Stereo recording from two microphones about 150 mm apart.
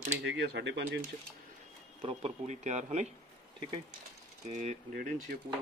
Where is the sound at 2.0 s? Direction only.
50° right (ahead or behind).